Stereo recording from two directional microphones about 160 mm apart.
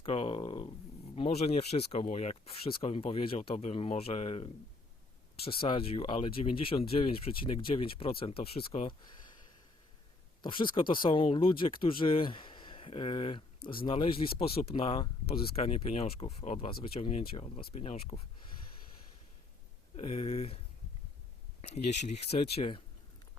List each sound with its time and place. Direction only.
0.0 s speech: 35° left (ahead or behind)
10.4 s speech: 30° left (ahead or behind)
20.0 s speech: 35° left (ahead or behind)
21.6 s speech: 45° left (ahead or behind)